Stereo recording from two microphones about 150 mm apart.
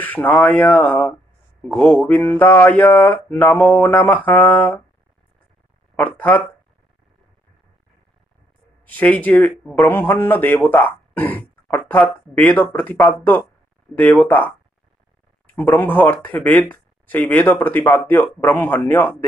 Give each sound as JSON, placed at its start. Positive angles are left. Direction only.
{"t": 0.0, "sound": "a man's voice", "side_deg": 10}
{"t": 6.1, "sound": "a man's voice", "side_deg": 10}
{"t": 8.8, "sound": "a man's voice", "side_deg": 10}